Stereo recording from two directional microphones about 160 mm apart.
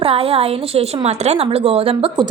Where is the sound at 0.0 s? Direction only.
35° right (ahead or behind).